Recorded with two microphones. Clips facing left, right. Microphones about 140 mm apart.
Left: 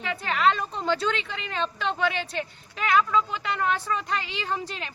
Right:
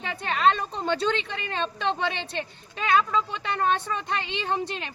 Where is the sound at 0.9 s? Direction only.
25° right (ahead or behind).